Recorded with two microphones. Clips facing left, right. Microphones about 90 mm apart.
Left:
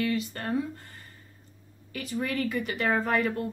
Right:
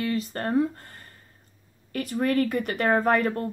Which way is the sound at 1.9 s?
50° right (ahead or behind).